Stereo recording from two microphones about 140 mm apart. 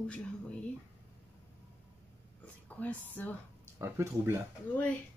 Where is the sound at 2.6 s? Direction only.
10° left (ahead or behind).